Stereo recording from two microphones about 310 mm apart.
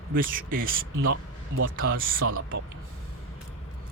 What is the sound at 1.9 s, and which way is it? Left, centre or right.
Speech, right.